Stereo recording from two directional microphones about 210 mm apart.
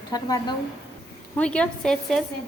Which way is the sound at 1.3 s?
5° left (ahead or behind).